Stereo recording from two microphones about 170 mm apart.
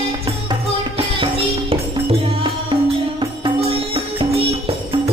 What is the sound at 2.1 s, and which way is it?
Music, 30° right (ahead or behind).